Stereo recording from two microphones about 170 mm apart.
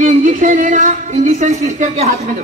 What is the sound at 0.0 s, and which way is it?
Speech, 50° right (ahead or behind).